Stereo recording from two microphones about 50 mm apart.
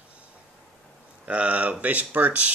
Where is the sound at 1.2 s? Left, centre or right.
Right.